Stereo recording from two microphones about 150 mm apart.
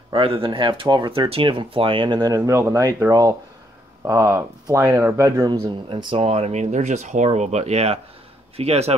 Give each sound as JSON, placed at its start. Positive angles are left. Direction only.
{"t": 0.1, "sound": "speech", "side_deg": -35}
{"t": 5.9, "sound": "speech", "side_deg": -35}